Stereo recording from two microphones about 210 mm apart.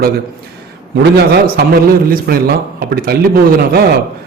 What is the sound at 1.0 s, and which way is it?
A man's voice, 50° right (ahead or behind).